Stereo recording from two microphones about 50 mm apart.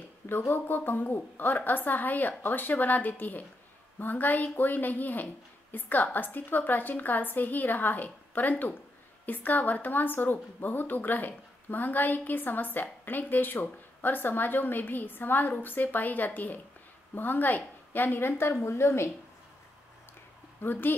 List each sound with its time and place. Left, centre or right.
0.5 s a woman's voice: left
18.5 s a woman's voice: left
20.6 s a woman's voice: left